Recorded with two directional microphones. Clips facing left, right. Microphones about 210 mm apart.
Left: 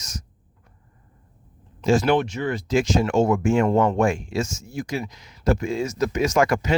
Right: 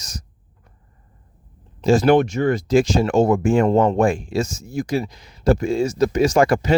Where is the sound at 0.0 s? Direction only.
35° right (ahead or behind).